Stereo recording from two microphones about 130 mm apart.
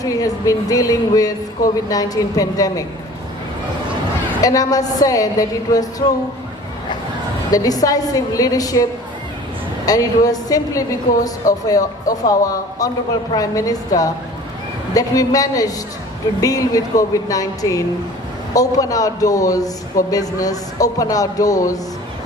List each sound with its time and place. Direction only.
0.0 s a man's voice: 25° left (ahead or behind)
4.4 s a man's voice: 30° left (ahead or behind)
7.5 s a man's voice: 30° left (ahead or behind)